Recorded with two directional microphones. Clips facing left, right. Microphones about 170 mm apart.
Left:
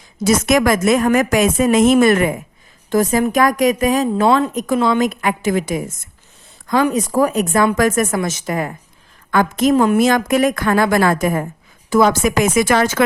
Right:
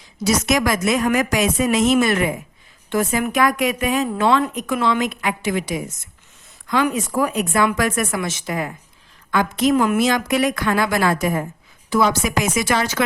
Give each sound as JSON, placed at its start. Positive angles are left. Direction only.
{"t": 0.2, "sound": "a woman's voice", "side_deg": 50}
{"t": 2.9, "sound": "speech", "side_deg": 40}
{"t": 4.3, "sound": "a woman's voice", "side_deg": 25}
{"t": 4.5, "sound": "a woman's voice", "side_deg": 40}
{"t": 6.8, "sound": "a woman's voice", "side_deg": 40}
{"t": 9.7, "sound": "speech", "side_deg": 30}
{"t": 10.0, "sound": "a woman's voice", "side_deg": 50}